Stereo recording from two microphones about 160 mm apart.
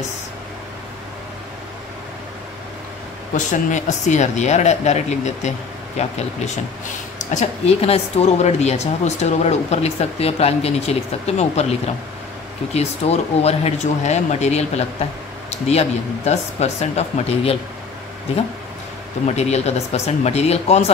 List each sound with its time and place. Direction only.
3.3 s speech: 50° left (ahead or behind)
12.7 s speech: 40° left (ahead or behind)
19.2 s speech: 45° left (ahead or behind)